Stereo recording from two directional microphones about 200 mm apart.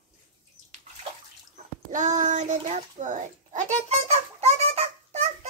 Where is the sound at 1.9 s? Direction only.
40° right (ahead or behind).